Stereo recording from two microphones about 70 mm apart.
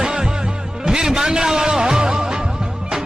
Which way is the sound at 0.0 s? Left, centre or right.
Centre.